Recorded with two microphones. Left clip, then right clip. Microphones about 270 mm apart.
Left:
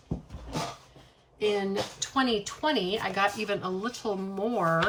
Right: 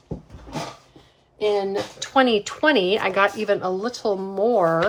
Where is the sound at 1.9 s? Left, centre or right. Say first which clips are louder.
Right 11 dB; centre.